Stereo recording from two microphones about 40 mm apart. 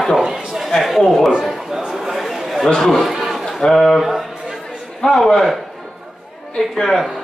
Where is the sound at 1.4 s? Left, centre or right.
Centre.